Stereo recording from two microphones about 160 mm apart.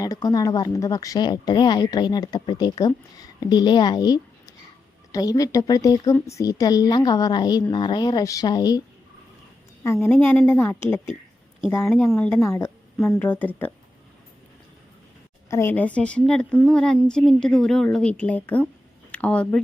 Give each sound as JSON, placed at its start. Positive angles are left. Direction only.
{"t": 0.0, "sound": "a woman's voice", "side_deg": 25}
{"t": 9.8, "sound": "speech", "side_deg": 15}
{"t": 11.9, "sound": "speech", "side_deg": 10}
{"t": 15.4, "sound": "speech", "side_deg": 15}